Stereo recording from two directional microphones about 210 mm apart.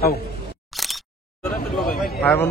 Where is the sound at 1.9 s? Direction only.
5° left (ahead or behind).